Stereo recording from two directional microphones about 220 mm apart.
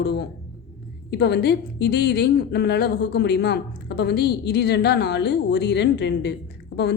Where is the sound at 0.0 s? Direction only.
50° left (ahead or behind).